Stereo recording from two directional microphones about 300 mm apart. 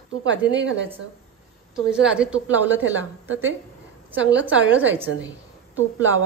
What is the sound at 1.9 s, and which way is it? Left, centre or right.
Speech, centre.